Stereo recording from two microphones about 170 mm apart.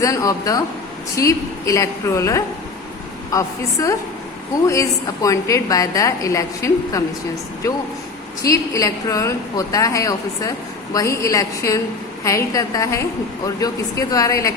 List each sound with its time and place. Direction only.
0.0 s a woman's voice: 20° left (ahead or behind)
8.4 s a woman's voice: 20° left (ahead or behind)